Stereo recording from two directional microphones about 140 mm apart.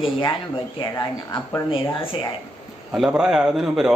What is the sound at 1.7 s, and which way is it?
Speech, 40° left (ahead or behind).